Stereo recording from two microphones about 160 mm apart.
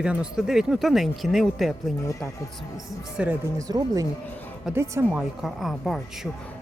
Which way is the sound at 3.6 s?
25° right (ahead or behind).